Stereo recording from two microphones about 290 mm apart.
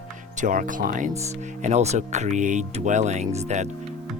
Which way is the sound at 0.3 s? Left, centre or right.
Right.